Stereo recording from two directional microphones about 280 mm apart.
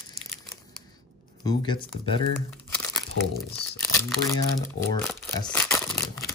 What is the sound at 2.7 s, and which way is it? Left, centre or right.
Crumpling, centre.